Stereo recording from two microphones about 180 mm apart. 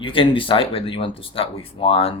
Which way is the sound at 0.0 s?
30° left (ahead or behind).